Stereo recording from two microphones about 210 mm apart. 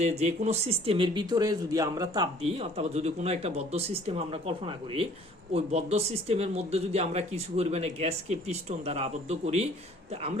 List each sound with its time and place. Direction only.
0.0 s speech: 30° right (ahead or behind)